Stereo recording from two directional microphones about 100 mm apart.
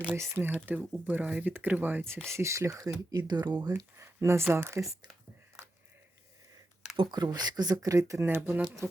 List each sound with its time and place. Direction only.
0.2 s speech: 25° right (ahead or behind)
2.2 s speech: 30° right (ahead or behind)
4.0 s speech: 25° right (ahead or behind)
6.9 s speech: 50° right (ahead or behind)
7.9 s speech: 30° right (ahead or behind)